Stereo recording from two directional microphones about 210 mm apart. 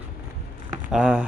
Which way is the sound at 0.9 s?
5° right (ahead or behind).